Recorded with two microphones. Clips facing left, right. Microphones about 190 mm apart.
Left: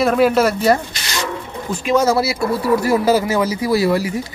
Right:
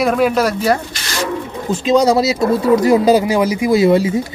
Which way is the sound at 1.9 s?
15° right (ahead or behind).